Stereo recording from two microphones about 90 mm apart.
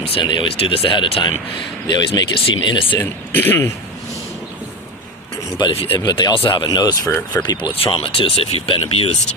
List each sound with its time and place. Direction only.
0.0 s speech: 80° left; by 3.0 s 60° left (ahead or behind)
3.0 s speech: 25° left (ahead or behind)
5.5 s speech: 75° left (ahead or behind)
6.0 s speech: 50° left (ahead or behind)
7.3 s speech: 30° left (ahead or behind)
7.9 s speech: 75° left (ahead or behind)